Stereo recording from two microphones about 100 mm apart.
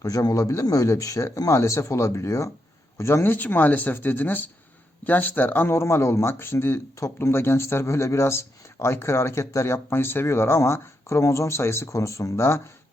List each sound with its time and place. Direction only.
0.0 s speech: 35° left (ahead or behind)